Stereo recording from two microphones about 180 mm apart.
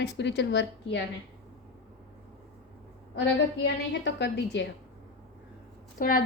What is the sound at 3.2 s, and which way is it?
A woman's voice, 75° left (ahead or behind).